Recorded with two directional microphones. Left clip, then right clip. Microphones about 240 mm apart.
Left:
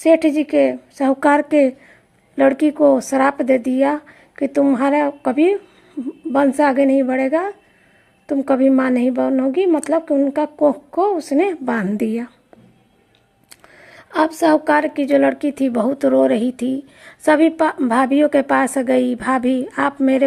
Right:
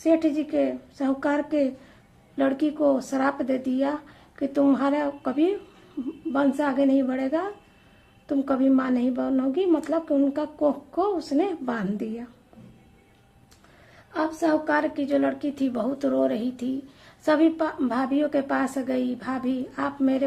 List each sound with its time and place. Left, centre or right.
0.0 s a woman's voice: left
13.5 s a woman's voice: left